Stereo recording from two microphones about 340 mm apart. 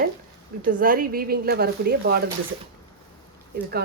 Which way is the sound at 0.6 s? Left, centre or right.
Right.